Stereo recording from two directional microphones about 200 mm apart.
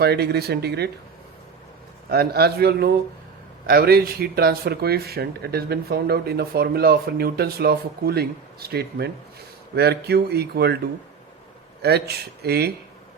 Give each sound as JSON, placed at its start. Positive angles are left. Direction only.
{"t": 0.0, "sound": "speech", "side_deg": -55}
{"t": 2.0, "sound": "speech", "side_deg": -50}
{"t": 11.8, "sound": "speech", "side_deg": -55}